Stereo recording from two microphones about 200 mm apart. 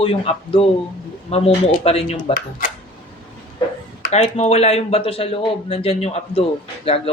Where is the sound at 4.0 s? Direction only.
30° left (ahead or behind).